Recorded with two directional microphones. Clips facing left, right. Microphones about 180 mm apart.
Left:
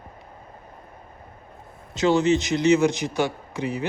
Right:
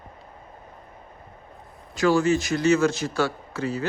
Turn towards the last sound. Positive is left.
turn(degrees=15)  # may be behind; listen again after turning